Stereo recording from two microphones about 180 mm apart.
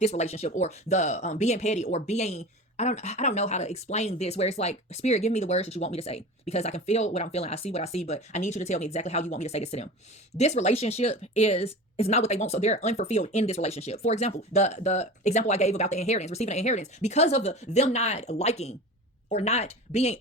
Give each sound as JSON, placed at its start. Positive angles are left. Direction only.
{"t": 0.0, "sound": "speech", "side_deg": 40}